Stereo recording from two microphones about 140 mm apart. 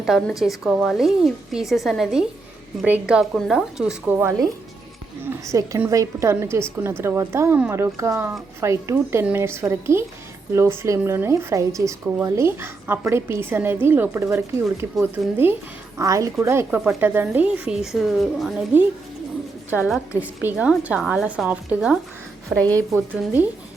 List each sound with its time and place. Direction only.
0.0 s a woman's voice: centre (ahead or behind); by 4.4 s 20° right (ahead or behind)
5.5 s speech: 25° right (ahead or behind); by 18.5 s centre (ahead or behind)
20.1 s speech: 10° right (ahead or behind)
22.5 s a woman's voice: 10° left (ahead or behind)
22.9 s speech: 15° right (ahead or behind)